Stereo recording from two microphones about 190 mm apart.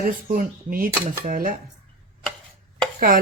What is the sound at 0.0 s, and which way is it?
Speech, 45° right (ahead or behind).